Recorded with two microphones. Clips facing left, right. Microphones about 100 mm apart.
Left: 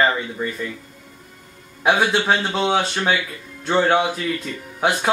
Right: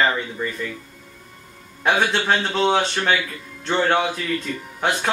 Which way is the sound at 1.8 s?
10° left (ahead or behind).